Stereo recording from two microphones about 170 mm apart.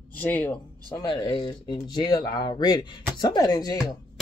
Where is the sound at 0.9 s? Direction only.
30° left (ahead or behind).